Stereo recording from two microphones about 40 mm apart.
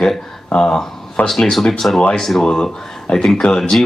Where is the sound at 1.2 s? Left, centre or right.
Left.